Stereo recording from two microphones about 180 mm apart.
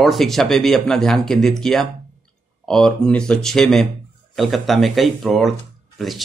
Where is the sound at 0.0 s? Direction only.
Centre (ahead or behind).